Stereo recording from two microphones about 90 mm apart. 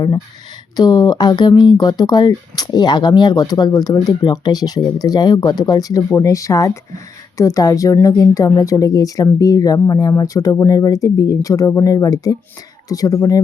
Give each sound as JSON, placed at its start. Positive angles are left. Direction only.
{"t": 0.8, "sound": "speech", "side_deg": 45}